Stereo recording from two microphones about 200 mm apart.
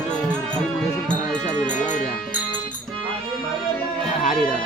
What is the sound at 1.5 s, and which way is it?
Music, 40° left (ahead or behind).